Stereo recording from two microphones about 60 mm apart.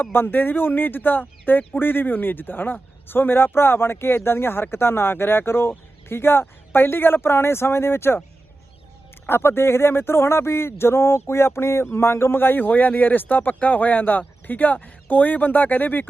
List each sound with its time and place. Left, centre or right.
0.0 s speech: left
9.2 s speech: left